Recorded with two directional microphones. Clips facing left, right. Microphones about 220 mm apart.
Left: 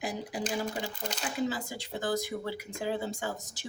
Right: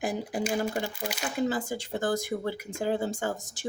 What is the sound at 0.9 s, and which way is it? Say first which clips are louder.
Speech: right 3 dB; 10° right (ahead or behind).